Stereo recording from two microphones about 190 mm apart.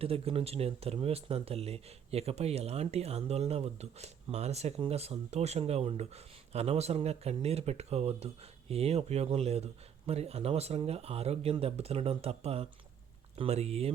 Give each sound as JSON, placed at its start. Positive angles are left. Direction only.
{"t": 0.0, "sound": "speech", "side_deg": -30}